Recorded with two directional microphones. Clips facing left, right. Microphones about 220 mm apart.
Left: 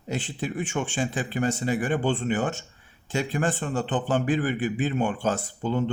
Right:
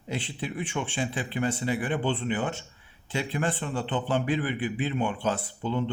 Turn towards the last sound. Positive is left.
turn(degrees=45)  # may be behind; listen again after turning